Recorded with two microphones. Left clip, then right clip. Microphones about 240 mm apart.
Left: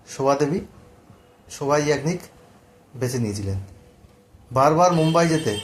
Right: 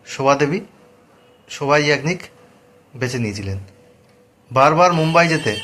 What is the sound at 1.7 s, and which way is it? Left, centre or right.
Speech, centre.